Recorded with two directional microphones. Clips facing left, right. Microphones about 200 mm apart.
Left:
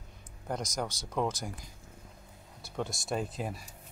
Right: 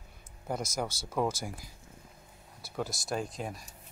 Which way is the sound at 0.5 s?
5° right (ahead or behind).